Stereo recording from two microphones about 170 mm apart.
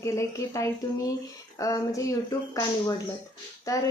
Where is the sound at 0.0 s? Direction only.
15° left (ahead or behind).